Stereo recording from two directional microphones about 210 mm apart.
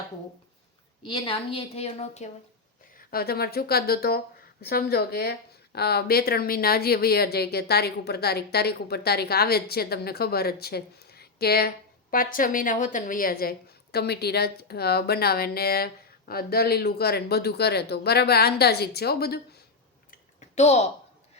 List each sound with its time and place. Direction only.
1.0 s a woman's voice: 25° left (ahead or behind)
3.1 s a woman's voice: 45° left (ahead or behind)
20.6 s speech: 30° left (ahead or behind)